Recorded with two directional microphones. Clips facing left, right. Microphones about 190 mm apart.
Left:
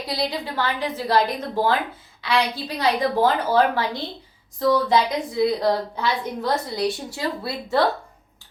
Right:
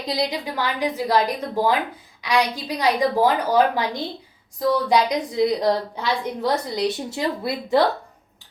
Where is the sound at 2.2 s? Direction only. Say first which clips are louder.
Right 1 dB; 15° right (ahead or behind).